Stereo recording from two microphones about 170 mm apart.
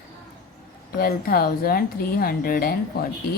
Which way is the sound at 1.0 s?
65° left (ahead or behind).